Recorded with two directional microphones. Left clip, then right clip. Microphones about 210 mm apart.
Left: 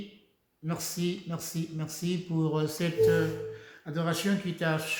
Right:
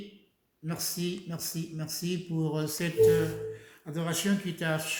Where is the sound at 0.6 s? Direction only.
5° left (ahead or behind).